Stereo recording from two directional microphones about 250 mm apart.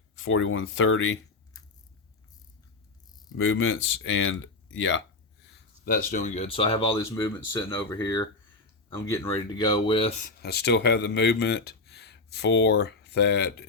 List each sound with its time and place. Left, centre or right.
0.2 s speech: left
3.3 s speech: left
5.8 s speech: left
6.9 s speech: centre
10.4 s speech: left